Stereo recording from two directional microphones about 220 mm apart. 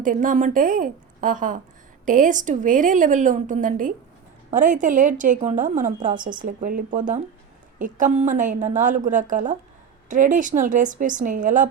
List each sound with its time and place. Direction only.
0.0 s a woman's voice: 35° right (ahead or behind)